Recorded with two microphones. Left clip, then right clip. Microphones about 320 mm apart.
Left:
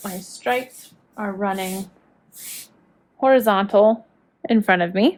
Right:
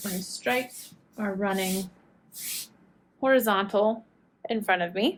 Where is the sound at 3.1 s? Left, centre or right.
Left.